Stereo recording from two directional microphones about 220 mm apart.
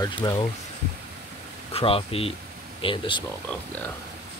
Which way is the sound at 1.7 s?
25° left (ahead or behind).